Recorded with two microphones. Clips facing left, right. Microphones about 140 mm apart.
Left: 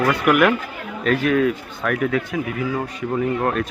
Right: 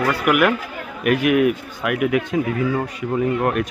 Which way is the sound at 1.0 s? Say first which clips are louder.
Right 2 dB; 15° right (ahead or behind).